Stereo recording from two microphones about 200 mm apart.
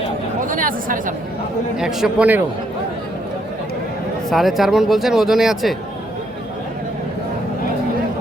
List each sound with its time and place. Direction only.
0.4 s speech: 45° right (ahead or behind)
1.7 s speech: 5° right (ahead or behind)
4.3 s speech: centre (ahead or behind)